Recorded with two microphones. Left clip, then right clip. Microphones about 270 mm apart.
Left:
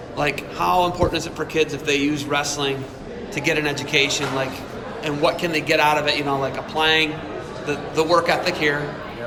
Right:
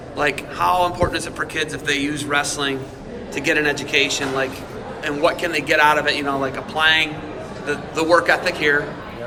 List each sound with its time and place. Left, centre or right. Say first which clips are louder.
0.2 s a man's voice: right 2 dB; centre